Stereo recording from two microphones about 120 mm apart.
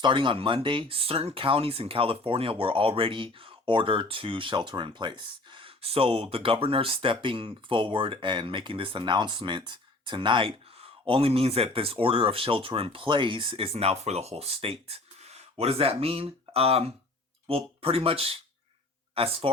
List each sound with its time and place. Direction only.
0.0 s speech: 40° right (ahead or behind)